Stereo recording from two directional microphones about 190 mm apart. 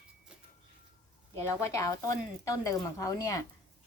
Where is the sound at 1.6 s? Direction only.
15° left (ahead or behind).